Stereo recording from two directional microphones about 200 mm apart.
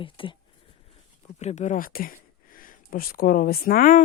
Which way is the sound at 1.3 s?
35° left (ahead or behind).